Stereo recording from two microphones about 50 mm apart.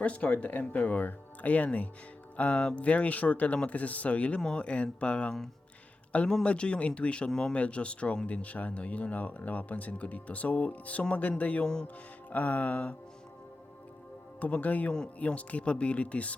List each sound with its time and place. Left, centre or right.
0.0 s speech: left
7.5 s speech: left
11.6 s speech: centre
12.3 s speech: left
14.3 s speech: left